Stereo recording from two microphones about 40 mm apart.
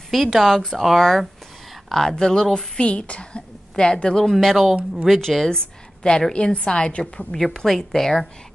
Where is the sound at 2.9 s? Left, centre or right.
Left.